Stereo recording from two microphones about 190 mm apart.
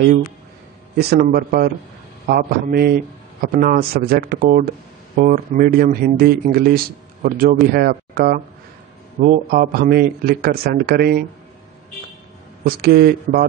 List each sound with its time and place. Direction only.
0.9 s speech: 55° right (ahead or behind)
12.6 s speech: 50° right (ahead or behind)